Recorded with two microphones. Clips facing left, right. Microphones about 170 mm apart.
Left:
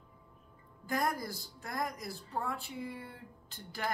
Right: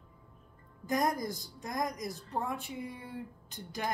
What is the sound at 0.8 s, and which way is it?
A woman's voice, 20° right (ahead or behind).